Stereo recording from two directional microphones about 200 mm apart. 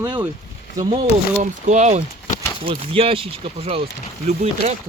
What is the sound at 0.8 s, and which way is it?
Speech, 30° right (ahead or behind).